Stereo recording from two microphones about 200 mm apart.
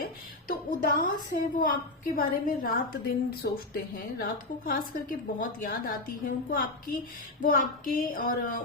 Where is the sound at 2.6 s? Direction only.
45° left (ahead or behind).